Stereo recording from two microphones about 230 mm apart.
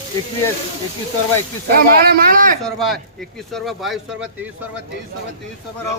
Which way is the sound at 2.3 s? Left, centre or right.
Right.